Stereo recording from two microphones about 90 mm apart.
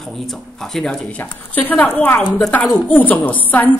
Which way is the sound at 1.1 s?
20° left (ahead or behind).